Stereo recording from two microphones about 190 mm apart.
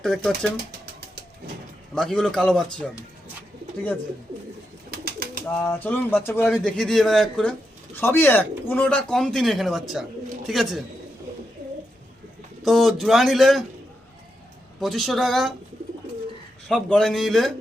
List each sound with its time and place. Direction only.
0.0 s speech: centre (ahead or behind)
2.0 s speech: 5° left (ahead or behind)
4.9 s pigeon: 55° right (ahead or behind)
5.6 s speech: 10° left (ahead or behind)
12.6 s speech: centre (ahead or behind)
14.8 s speech: centre (ahead or behind)
16.6 s speech: 5° left (ahead or behind)